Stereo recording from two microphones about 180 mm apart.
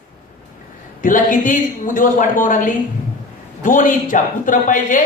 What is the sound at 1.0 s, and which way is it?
A man's voice, 45° left (ahead or behind).